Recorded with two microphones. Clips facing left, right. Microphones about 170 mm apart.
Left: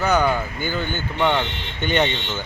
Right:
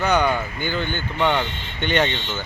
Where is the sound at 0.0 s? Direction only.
5° left (ahead or behind).